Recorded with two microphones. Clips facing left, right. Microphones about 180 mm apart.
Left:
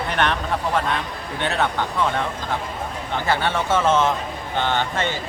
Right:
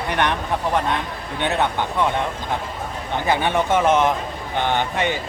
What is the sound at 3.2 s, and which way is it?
Speech, 15° right (ahead or behind).